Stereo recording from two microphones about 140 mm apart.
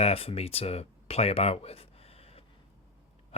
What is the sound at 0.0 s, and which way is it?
Speech, 45° left (ahead or behind).